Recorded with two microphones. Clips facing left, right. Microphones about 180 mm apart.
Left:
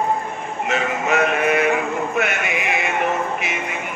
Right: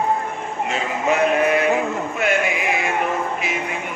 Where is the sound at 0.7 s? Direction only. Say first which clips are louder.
Left 1 dB; 70° left (ahead or behind).